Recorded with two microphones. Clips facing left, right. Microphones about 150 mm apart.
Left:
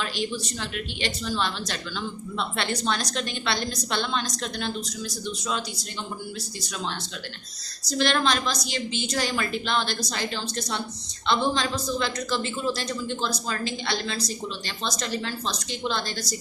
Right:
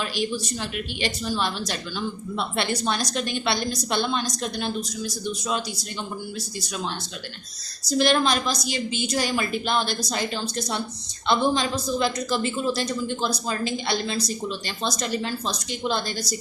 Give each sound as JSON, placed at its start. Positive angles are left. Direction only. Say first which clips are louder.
{"t": 0.0, "sound": "a woman's voice", "louder": "right 2 dB", "side_deg": -10}
{"t": 7.9, "sound": "a woman's voice", "louder": "right 3 dB", "side_deg": -10}